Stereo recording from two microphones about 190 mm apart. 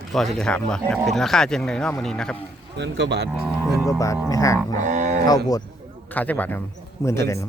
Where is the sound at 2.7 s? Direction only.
65° right (ahead or behind).